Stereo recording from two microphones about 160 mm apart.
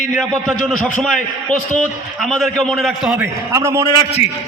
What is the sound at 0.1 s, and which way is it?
A man's voice, 5° left (ahead or behind).